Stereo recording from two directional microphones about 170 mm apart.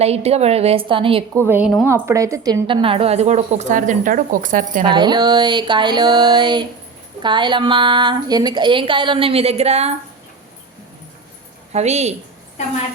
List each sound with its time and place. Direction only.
0.0 s a woman's voice: 40° right (ahead or behind)
1.5 s a woman's voice: 10° right (ahead or behind); by 4.8 s 50° right (ahead or behind)
4.9 s a woman's voice: 25° right (ahead or behind)
11.7 s a woman's voice: 40° right (ahead or behind)